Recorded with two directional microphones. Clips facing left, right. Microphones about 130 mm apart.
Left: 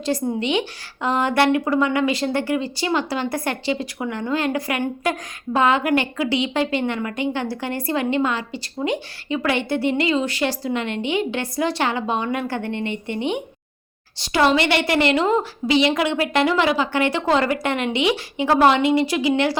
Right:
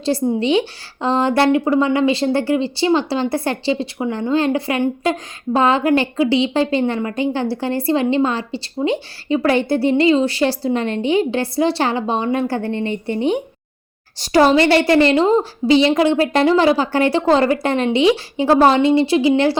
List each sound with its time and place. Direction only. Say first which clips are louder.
0.0 s a woman's voice: right 5 dB; 30° right (ahead or behind)